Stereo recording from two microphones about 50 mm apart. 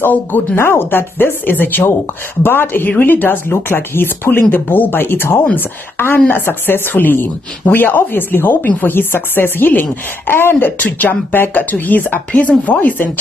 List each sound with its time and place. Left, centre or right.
0.0 s speech: left
6.1 s speech: left
6.4 s speech: left